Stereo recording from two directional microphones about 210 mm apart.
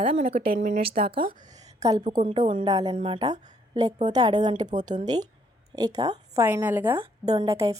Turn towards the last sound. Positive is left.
turn(degrees=-15)  # may be behind; listen again after turning